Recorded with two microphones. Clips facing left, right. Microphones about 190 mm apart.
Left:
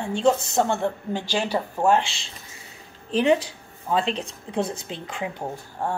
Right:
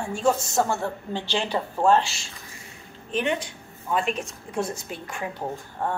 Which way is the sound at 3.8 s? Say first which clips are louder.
Left 2 dB; 30° left (ahead or behind).